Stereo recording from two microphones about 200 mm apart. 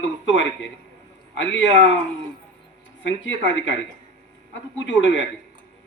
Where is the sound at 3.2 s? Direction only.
65° left (ahead or behind).